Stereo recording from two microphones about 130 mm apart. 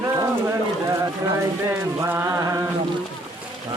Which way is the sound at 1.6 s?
20° right (ahead or behind).